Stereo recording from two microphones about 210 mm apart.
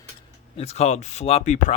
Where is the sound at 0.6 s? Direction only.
30° left (ahead or behind).